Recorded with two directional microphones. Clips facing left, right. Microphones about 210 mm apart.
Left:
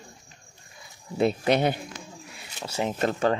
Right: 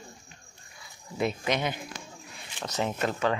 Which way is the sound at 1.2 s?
35° left (ahead or behind).